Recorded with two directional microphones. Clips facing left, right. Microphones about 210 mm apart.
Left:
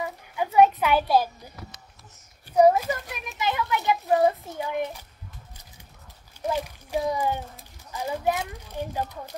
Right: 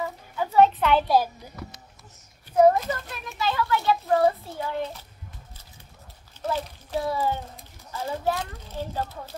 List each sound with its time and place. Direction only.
0.0 s a sound: 15° left (ahead or behind)
2.6 s a child's voice: 10° left (ahead or behind)
6.4 s a child's voice: 15° left (ahead or behind)